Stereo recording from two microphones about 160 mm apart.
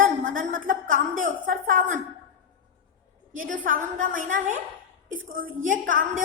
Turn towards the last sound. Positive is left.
turn(degrees=-55)  # may be behind; listen again after turning